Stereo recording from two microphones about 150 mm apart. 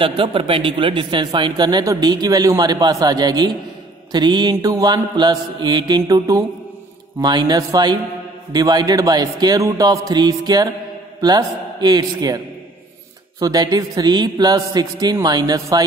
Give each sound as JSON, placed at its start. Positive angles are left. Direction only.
{"t": 0.0, "sound": "a man's voice", "side_deg": -35}
{"t": 13.4, "sound": "speech", "side_deg": -25}